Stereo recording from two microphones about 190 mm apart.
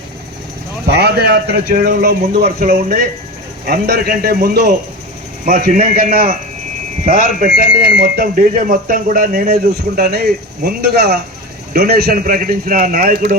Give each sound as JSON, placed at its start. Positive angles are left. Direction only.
{"t": 0.9, "sound": "a man's voice", "side_deg": -60}
{"t": 3.7, "sound": "speech", "side_deg": -60}